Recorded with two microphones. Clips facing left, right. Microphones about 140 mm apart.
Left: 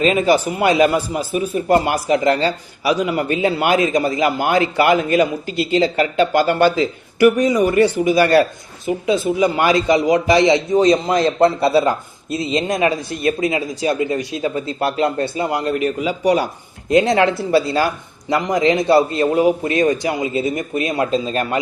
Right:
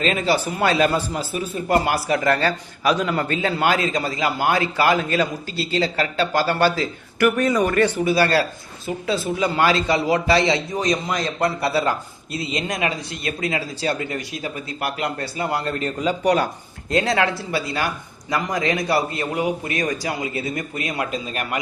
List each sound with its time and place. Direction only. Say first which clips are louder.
0.0 s a man's voice: left 6 dB; 15° left (ahead or behind)
16.9 s a man's voice: left 6 dB; 20° left (ahead or behind)